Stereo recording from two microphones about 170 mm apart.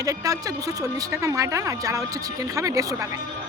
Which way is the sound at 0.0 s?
20° right (ahead or behind).